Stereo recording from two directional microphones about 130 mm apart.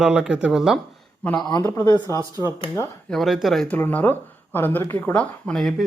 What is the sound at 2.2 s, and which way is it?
Speech, 25° right (ahead or behind).